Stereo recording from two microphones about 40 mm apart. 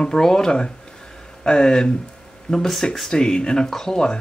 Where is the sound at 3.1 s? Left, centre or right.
Centre.